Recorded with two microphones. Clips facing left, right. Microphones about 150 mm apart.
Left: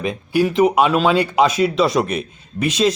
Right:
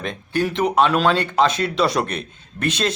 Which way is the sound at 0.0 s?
5° left (ahead or behind).